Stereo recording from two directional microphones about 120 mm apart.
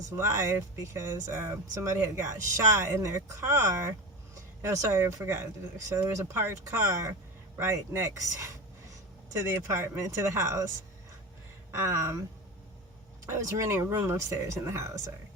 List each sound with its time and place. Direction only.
0.2 s speech: 25° right (ahead or behind)
11.7 s speech: 25° right (ahead or behind)
13.2 s speech: 25° right (ahead or behind)